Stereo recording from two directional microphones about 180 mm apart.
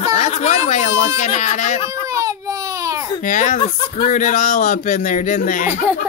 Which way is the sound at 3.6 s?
30° left (ahead or behind).